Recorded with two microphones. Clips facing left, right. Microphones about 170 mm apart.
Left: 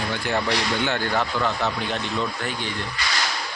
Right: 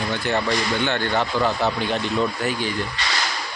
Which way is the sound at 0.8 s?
5° left (ahead or behind).